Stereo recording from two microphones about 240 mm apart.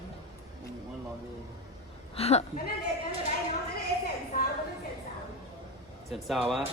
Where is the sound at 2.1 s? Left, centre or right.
Left.